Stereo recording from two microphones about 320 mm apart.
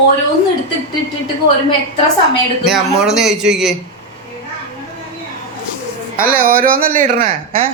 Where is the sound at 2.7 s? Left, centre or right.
Centre.